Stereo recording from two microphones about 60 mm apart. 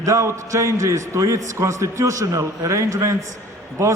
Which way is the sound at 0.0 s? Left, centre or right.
Right.